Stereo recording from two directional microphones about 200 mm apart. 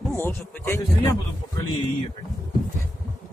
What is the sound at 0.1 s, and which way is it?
Speech, 10° left (ahead or behind).